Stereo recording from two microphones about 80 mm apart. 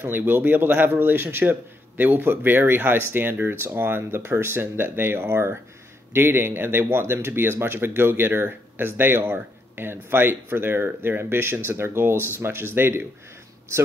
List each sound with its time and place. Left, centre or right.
0.0 s speech: right